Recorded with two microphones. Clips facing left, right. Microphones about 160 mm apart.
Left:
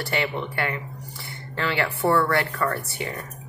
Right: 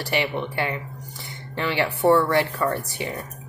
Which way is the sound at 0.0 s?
20° right (ahead or behind).